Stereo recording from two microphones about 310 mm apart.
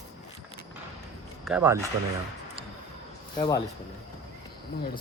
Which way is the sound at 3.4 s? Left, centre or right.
Centre.